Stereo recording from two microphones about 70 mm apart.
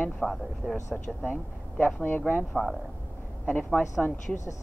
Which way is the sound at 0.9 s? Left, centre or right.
Left.